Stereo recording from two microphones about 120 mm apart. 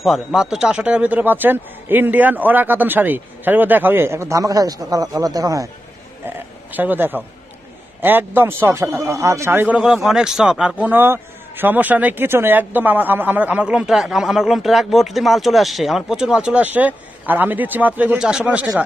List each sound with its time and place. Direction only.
0.0 s speech: centre (ahead or behind); by 5.7 s 30° right (ahead or behind)
6.2 s a man's voice: 15° right (ahead or behind)
9.8 s speech: 5° right (ahead or behind)